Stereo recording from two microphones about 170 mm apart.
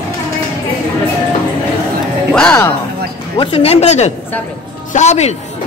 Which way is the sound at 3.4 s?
35° left (ahead or behind).